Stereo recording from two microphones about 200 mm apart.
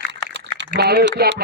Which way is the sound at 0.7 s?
55° right (ahead or behind).